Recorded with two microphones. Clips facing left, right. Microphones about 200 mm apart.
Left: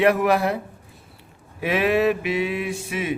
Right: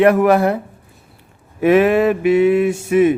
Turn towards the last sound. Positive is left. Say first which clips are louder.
# right 13 dB
turn(degrees=-45)  # may be behind; listen again after turning